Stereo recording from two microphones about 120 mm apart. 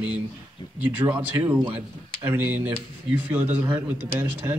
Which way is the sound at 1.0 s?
15° right (ahead or behind).